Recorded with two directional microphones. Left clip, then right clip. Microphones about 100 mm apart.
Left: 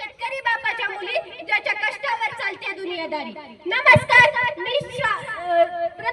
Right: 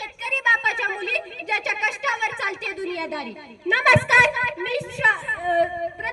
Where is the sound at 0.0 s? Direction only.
25° right (ahead or behind).